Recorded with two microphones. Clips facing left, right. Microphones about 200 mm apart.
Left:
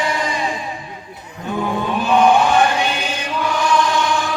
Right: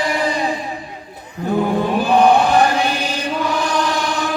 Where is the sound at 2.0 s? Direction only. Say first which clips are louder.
Even; 35° right (ahead or behind).